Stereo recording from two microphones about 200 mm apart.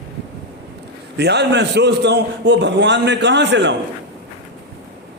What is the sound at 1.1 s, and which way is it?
A man's voice, 55° right (ahead or behind).